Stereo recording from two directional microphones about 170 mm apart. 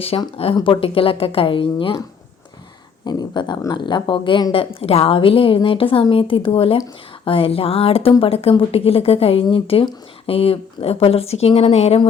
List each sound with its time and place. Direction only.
0.0 s a woman's voice: 35° left (ahead or behind)